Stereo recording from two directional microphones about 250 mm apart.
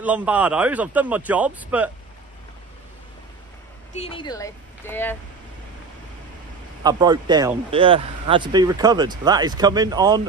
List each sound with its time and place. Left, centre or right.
0.0 s a man's voice: centre
3.9 s speech: left
6.8 s speech: centre